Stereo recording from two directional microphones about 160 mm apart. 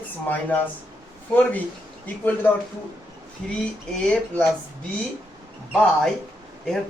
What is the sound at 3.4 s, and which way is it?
Speech, 5° left (ahead or behind).